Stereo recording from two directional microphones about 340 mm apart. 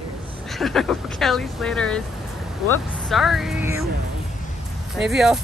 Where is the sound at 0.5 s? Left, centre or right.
Centre.